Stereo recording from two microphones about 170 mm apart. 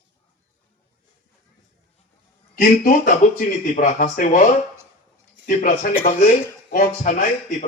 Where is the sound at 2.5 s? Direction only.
50° left (ahead or behind).